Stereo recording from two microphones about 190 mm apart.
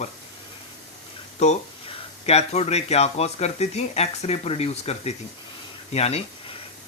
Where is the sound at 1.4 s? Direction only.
35° left (ahead or behind).